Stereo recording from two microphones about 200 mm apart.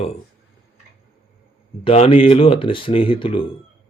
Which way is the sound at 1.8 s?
30° left (ahead or behind).